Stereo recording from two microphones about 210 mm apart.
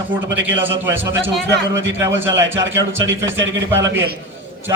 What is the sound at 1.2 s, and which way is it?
Speech, 60° right (ahead or behind).